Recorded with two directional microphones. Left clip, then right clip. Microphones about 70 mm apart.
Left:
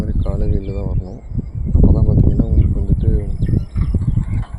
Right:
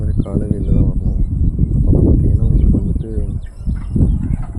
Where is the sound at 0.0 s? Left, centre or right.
Right.